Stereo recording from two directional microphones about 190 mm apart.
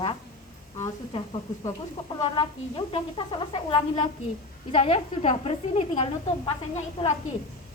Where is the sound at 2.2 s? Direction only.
30° left (ahead or behind).